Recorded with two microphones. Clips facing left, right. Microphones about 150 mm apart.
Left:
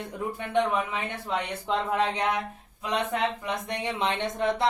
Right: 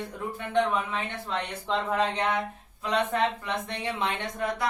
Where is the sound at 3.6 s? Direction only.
20° left (ahead or behind).